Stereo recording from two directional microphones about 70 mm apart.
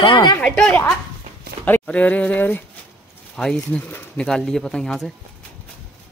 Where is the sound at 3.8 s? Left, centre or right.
Left.